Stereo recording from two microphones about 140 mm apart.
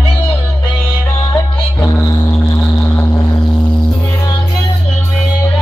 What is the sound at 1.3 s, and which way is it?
Music, 25° left (ahead or behind).